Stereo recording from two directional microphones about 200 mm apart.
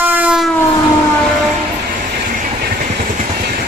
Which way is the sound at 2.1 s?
50° right (ahead or behind).